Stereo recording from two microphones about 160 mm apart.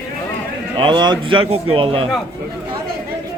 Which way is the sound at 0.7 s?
30° right (ahead or behind).